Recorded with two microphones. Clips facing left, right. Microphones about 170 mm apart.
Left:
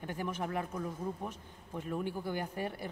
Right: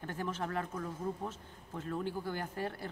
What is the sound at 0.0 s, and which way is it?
Speech, 15° left (ahead or behind).